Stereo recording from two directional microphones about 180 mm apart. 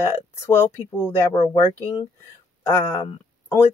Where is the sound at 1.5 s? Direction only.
25° left (ahead or behind).